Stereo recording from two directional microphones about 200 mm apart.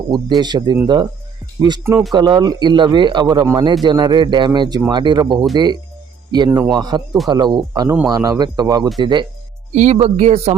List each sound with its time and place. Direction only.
0.1 s speech: 20° right (ahead or behind)
9.7 s a man's voice: 35° right (ahead or behind)